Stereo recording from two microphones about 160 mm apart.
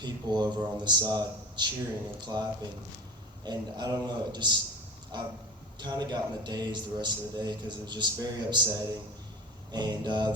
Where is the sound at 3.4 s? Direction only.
25° right (ahead or behind).